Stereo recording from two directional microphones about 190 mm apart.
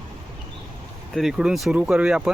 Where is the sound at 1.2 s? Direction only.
5° right (ahead or behind).